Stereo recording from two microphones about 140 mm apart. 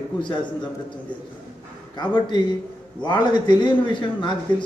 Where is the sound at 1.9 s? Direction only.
30° left (ahead or behind).